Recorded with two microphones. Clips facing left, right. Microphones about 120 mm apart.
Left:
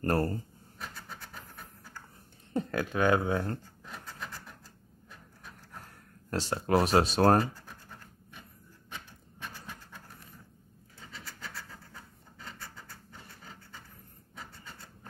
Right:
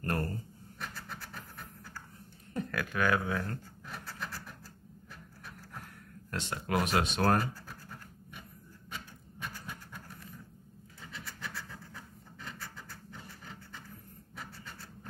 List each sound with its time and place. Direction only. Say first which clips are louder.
0.0 s speech: left 6 dB; 35° left (ahead or behind)
1.3 s train: right 1 dB; 25° left (ahead or behind)
2.5 s scratch: left 4 dB; 25° left (ahead or behind)
6.3 s speech: left 6 dB; 35° left (ahead or behind)
11.9 s scratch: right 2 dB; 25° left (ahead or behind)